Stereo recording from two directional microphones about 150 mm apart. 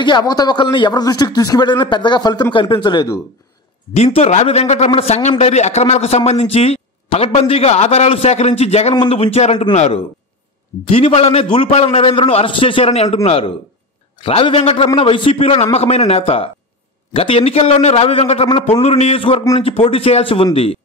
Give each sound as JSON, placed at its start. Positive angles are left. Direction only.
{"t": 0.0, "sound": "a man's voice", "side_deg": 30}
{"t": 3.9, "sound": "a man's voice", "side_deg": 45}